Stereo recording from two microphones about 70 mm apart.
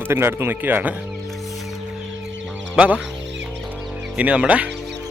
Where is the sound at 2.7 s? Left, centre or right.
Centre.